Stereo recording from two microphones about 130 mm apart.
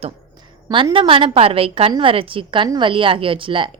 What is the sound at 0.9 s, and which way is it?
A woman's voice, 40° right (ahead or behind).